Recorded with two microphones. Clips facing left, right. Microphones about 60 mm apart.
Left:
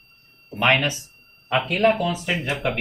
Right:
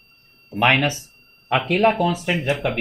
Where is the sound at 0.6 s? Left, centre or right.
Right.